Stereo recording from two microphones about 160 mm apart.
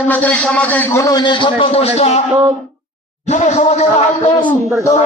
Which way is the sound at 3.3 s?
45° left (ahead or behind).